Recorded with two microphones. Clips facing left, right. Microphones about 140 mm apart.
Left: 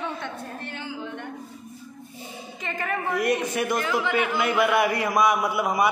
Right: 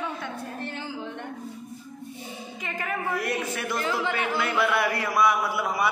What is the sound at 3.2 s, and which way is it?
Speech, 15° left (ahead or behind).